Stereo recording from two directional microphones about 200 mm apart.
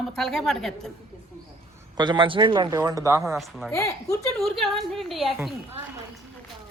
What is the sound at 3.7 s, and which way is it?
Speech, 15° left (ahead or behind).